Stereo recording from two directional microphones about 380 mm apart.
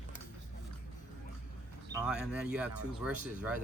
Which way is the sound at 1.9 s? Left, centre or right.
Centre.